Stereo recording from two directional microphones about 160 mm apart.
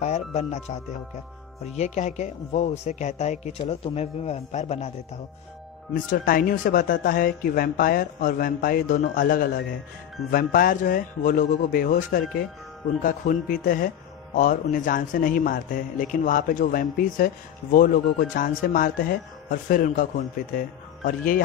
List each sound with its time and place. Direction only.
0.0 s speech: 45° left (ahead or behind)
6.0 s a man's voice: 65° left (ahead or behind)